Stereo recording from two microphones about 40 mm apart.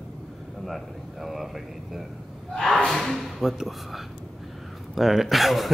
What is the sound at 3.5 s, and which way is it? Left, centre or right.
Speech, centre.